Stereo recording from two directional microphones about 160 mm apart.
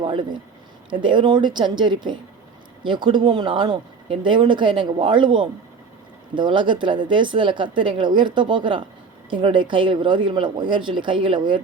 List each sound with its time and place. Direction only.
0.0 s a man's voice: 30° right (ahead or behind)